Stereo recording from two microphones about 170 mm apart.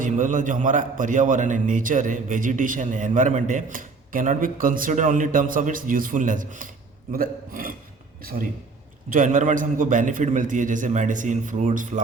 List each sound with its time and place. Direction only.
0.0 s a man's voice: 50° right (ahead or behind)
9.1 s a man's voice: 50° right (ahead or behind)